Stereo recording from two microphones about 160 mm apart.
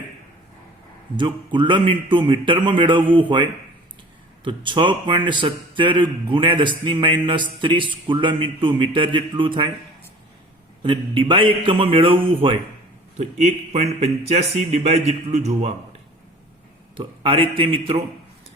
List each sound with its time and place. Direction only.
1.1 s a man's voice: 30° right (ahead or behind)
10.8 s speech: 30° right (ahead or behind)
13.1 s a man's voice: 45° right (ahead or behind)
17.0 s speech: 30° right (ahead or behind)